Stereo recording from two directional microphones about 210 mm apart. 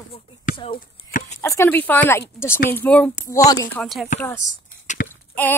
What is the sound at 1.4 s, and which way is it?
Speech, 10° left (ahead or behind).